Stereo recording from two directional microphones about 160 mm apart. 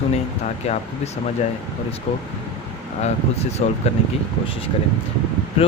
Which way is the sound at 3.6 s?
45° left (ahead or behind).